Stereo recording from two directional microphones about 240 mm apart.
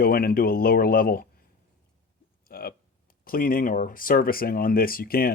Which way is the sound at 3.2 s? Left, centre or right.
Left.